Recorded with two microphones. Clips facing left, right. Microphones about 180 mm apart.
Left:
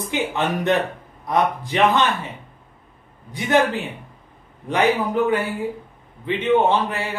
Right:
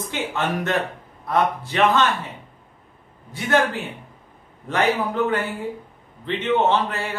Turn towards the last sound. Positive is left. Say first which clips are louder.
# left 2 dB
turn(degrees=15)  # may be behind; listen again after turning